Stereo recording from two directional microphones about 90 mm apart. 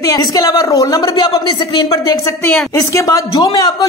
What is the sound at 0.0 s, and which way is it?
A man's voice, 45° left (ahead or behind).